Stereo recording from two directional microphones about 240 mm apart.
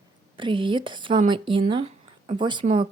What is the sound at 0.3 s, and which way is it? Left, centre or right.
Speech, right.